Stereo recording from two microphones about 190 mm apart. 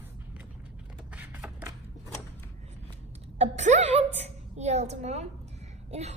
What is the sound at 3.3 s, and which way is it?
A woman's voice, 35° right (ahead or behind).